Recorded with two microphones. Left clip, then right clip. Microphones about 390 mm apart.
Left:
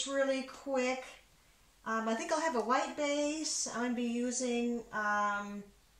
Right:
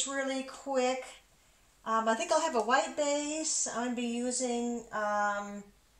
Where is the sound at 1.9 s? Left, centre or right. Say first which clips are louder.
Right 5 dB; centre.